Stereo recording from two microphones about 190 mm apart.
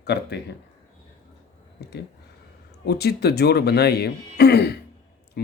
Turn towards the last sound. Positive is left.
turn(degrees=60)  # may be behind; listen again after turning